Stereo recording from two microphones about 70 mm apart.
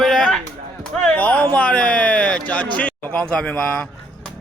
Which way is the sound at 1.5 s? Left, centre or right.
Centre.